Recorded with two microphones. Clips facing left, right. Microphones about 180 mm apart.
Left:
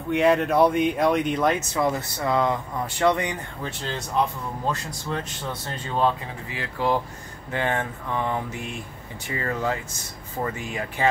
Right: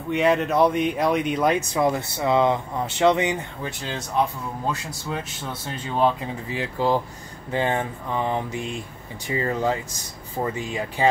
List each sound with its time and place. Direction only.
0.1 s speech: centre (ahead or behind)
1.5 s speech: 15° right (ahead or behind)
3.6 s speech: 10° right (ahead or behind)
5.1 s speech: 10° right (ahead or behind)
6.5 s speech: 30° right (ahead or behind)
7.5 s speech: 20° right (ahead or behind)